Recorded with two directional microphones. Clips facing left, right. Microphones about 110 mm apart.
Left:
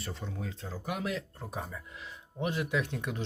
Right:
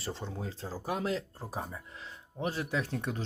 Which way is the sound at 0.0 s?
30° right (ahead or behind).